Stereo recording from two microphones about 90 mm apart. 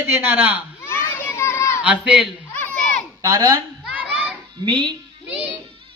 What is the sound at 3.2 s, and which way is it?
Speech, 45° right (ahead or behind).